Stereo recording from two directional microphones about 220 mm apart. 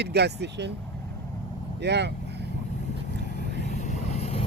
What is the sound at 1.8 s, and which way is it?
Speech, 50° right (ahead or behind).